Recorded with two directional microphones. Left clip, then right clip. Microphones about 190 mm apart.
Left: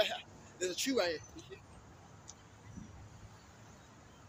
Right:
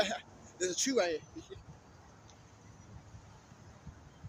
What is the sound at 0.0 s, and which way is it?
Speech, 20° right (ahead or behind).